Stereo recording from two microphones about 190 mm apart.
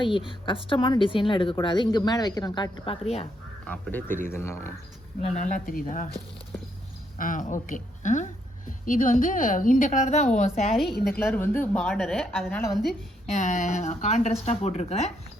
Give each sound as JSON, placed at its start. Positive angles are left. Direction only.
{"t": 0.0, "sound": "a woman's voice", "side_deg": 25}
{"t": 3.7, "sound": "speech", "side_deg": 10}
{"t": 5.2, "sound": "a woman's voice", "side_deg": 40}
{"t": 7.2, "sound": "a woman's voice", "side_deg": 45}
{"t": 11.0, "sound": "a woman's voice", "side_deg": 10}
{"t": 13.3, "sound": "speech", "side_deg": 40}